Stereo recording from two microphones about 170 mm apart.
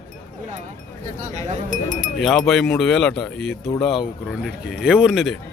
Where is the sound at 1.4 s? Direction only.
50° right (ahead or behind).